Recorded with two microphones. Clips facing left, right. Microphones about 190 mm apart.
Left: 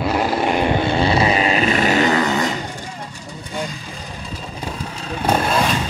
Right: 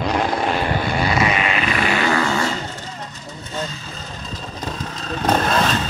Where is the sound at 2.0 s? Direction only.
20° left (ahead or behind).